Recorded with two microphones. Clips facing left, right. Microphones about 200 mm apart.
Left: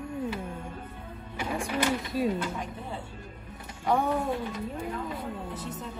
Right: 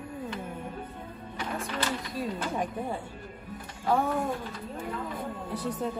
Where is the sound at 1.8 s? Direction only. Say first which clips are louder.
Left 6 dB; 10° left (ahead or behind).